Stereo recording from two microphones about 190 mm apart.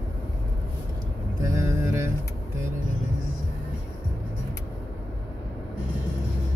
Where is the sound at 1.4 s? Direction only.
15° right (ahead or behind).